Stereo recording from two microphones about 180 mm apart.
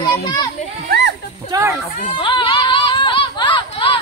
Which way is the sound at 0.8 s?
75° right (ahead or behind).